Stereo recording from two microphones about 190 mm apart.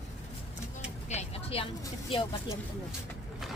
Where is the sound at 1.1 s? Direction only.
35° left (ahead or behind).